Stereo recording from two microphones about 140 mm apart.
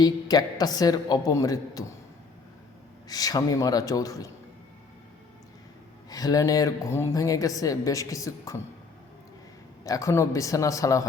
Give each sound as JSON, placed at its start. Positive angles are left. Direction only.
{"t": 0.0, "sound": "a woman's voice", "side_deg": 30}
{"t": 3.1, "sound": "a woman's voice", "side_deg": 25}
{"t": 6.1, "sound": "a woman's voice", "side_deg": 25}
{"t": 9.8, "sound": "a woman's voice", "side_deg": 25}